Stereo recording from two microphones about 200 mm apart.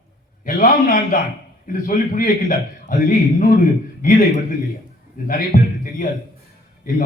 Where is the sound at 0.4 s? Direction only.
45° left (ahead or behind).